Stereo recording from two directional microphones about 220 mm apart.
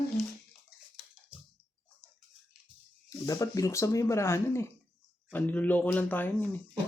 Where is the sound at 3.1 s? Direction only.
15° left (ahead or behind).